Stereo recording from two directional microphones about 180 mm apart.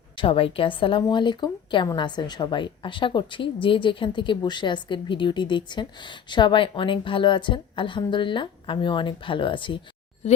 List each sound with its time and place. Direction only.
0.2 s a woman's voice: 30° left (ahead or behind)